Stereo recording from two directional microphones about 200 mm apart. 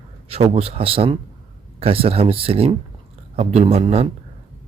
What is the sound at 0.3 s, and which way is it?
Speech, 30° right (ahead or behind).